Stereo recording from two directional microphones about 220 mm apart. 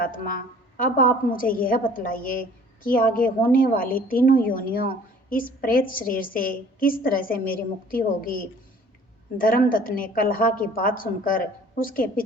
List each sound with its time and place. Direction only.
0.0 s a woman's voice: 40° left (ahead or behind)